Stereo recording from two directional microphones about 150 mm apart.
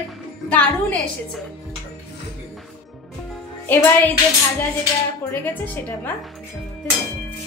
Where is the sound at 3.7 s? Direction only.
10° left (ahead or behind).